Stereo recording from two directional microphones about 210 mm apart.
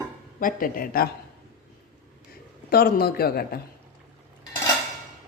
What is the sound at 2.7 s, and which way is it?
Speech, 45° left (ahead or behind).